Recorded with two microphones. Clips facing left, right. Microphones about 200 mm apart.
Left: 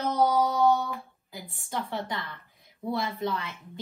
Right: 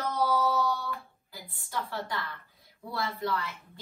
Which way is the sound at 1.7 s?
20° left (ahead or behind).